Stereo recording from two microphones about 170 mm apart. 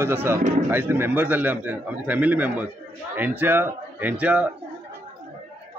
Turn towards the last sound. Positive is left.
turn(degrees=-10)  # may be behind; listen again after turning